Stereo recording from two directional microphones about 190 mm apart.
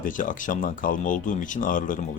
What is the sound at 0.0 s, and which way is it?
Speech, 45° left (ahead or behind).